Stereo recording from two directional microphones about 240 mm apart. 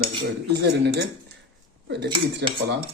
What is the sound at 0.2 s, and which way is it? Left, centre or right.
Speech, right.